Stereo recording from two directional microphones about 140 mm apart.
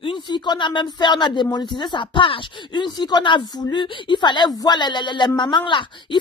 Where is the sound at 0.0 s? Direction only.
35° left (ahead or behind).